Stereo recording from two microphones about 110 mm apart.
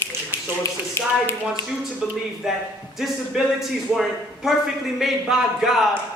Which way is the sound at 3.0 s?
Centre (ahead or behind).